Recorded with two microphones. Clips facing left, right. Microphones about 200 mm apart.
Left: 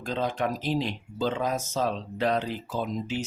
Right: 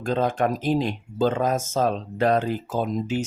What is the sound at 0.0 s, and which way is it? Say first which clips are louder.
Speech: right 6 dB; 50° right (ahead or behind).